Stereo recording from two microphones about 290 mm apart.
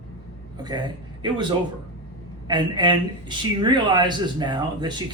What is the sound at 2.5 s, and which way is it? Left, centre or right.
Speech, centre.